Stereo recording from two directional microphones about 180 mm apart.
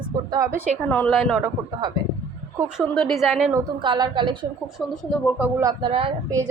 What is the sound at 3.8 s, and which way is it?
Speech, 25° right (ahead or behind).